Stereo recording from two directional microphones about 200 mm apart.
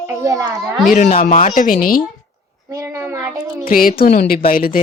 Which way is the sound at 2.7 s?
15° right (ahead or behind).